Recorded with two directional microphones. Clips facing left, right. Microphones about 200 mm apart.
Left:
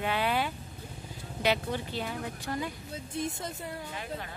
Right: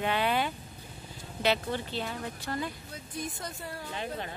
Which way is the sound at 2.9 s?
25° left (ahead or behind).